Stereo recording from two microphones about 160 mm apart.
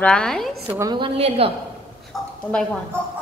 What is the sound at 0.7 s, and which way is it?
Speech, 20° right (ahead or behind).